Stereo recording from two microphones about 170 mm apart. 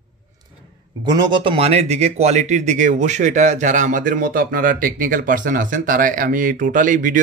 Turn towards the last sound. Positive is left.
turn(degrees=-50)  # may be behind; listen again after turning